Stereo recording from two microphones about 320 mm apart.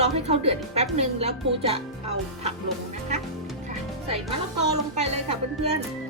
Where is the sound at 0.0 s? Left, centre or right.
Centre.